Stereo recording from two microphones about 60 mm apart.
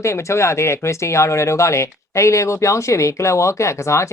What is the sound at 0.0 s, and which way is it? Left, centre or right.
Speech, left.